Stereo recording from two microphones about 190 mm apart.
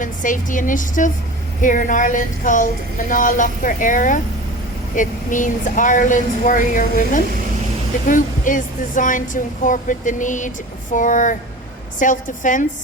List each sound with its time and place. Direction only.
0.0 s a woman's voice: 45° left (ahead or behind)